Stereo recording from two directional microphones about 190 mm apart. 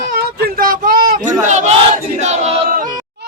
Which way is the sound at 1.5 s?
35° right (ahead or behind).